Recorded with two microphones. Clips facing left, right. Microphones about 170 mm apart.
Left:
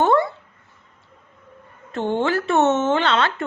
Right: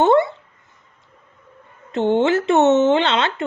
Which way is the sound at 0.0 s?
20° right (ahead or behind).